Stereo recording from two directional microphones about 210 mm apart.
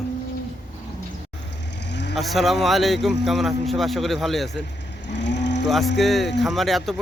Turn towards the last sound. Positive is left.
turn(degrees=0)  # may be behind; listen again after turning